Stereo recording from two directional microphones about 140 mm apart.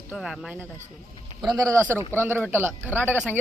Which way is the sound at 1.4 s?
25° right (ahead or behind).